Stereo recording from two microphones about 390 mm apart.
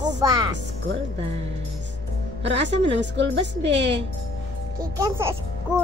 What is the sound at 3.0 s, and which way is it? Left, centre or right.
Speech, right.